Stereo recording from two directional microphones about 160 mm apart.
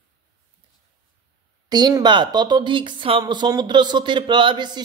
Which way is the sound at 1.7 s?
25° right (ahead or behind).